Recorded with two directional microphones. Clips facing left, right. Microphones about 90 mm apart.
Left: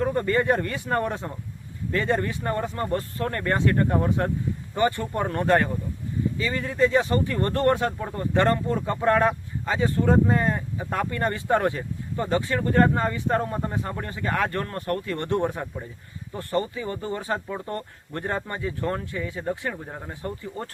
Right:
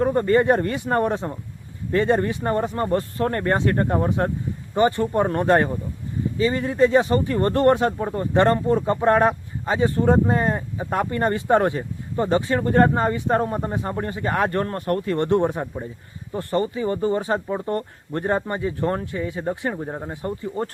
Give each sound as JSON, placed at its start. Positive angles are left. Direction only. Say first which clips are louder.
{"t": 0.0, "sound": "speech", "louder": "right 5 dB", "side_deg": -30}